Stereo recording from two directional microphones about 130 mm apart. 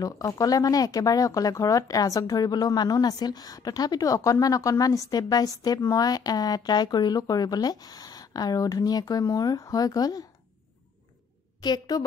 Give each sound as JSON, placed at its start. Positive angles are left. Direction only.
{"t": 0.0, "sound": "speech", "side_deg": 30}
{"t": 11.6, "sound": "a woman's voice", "side_deg": 35}